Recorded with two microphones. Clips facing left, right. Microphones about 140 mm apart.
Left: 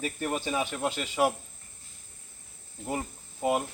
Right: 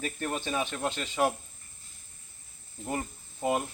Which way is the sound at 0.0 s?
10° left (ahead or behind).